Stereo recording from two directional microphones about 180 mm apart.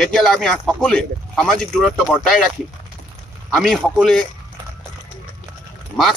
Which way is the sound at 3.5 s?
Centre (ahead or behind).